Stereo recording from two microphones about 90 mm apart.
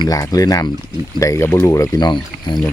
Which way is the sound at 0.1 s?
40° left (ahead or behind).